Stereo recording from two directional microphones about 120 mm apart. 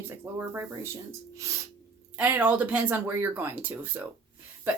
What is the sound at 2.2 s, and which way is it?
Speech, 10° right (ahead or behind).